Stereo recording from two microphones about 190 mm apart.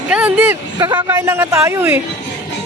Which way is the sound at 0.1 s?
10° right (ahead or behind).